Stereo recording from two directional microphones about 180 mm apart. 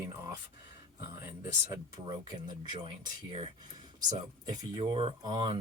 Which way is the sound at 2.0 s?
25° right (ahead or behind).